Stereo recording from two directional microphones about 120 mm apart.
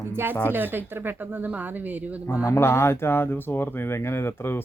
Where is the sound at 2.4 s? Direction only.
25° left (ahead or behind).